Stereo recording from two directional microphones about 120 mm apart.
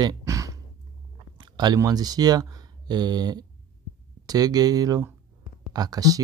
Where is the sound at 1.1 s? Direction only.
40° right (ahead or behind).